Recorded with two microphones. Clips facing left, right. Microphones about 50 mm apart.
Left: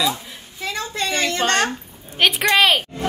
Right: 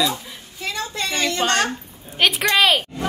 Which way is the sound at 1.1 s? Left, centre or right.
Left.